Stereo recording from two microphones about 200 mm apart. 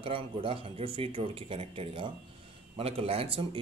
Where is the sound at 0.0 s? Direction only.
25° right (ahead or behind).